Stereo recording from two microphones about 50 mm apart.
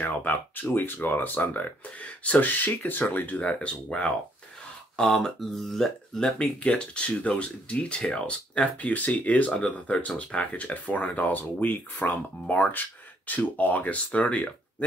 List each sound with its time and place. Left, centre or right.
0.0 s speech: left
3.3 s speech: left
4.9 s speech: centre
6.3 s speech: left
8.5 s speech: left